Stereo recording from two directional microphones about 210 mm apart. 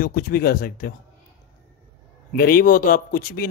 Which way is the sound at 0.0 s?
45° left (ahead or behind).